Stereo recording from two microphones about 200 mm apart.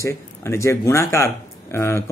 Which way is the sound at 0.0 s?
15° left (ahead or behind).